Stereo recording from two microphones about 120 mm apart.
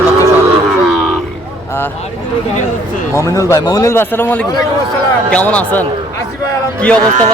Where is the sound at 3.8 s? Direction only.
20° left (ahead or behind).